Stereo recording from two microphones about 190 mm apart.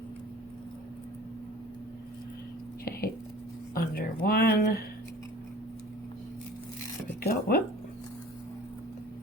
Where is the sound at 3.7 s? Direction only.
50° left (ahead or behind).